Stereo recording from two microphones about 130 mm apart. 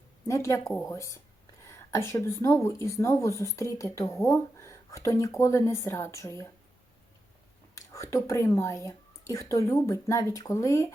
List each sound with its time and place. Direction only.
0.3 s speech: 25° left (ahead or behind)
7.8 s speech: 20° left (ahead or behind)